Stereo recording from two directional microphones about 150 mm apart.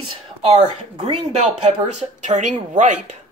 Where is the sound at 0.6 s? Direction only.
45° right (ahead or behind).